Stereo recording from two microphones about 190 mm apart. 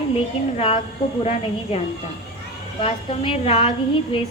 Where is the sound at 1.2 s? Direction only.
30° left (ahead or behind).